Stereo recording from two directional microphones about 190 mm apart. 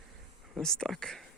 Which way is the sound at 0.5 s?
5° left (ahead or behind).